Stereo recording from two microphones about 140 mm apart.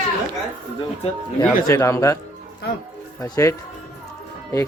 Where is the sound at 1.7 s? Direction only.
20° left (ahead or behind).